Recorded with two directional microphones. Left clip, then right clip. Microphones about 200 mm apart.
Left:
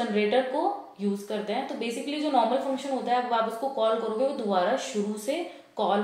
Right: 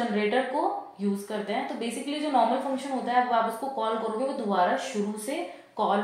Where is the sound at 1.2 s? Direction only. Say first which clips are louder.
Even; 25° right (ahead or behind).